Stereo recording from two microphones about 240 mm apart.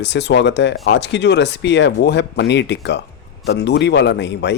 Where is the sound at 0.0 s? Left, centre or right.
Left.